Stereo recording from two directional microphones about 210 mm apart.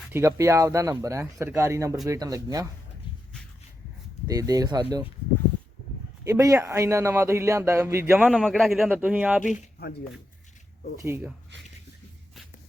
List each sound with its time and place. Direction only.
0.1 s speech: 15° right (ahead or behind)
4.3 s speech: 15° right (ahead or behind)
6.2 s speech: 15° right (ahead or behind)
9.4 s speech: 45° left (ahead or behind)
11.0 s speech: 10° right (ahead or behind)